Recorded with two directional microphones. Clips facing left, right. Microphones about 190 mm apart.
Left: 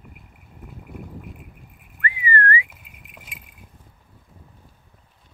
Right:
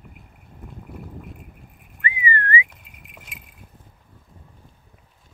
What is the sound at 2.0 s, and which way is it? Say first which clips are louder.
Whistling: left 2 dB; 15° right (ahead or behind).